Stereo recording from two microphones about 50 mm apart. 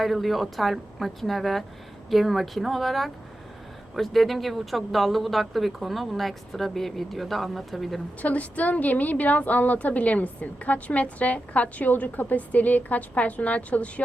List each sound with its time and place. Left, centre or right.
0.0 s speech: centre
8.2 s a woman's voice: left